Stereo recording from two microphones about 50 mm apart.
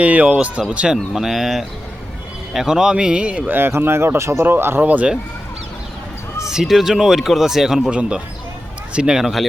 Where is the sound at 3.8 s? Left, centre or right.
Right.